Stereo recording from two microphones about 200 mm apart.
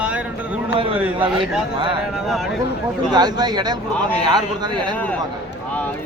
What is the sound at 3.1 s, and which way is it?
Speech, 20° right (ahead or behind).